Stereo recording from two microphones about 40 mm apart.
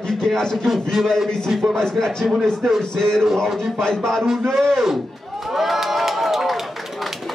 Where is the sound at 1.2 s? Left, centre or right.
Centre.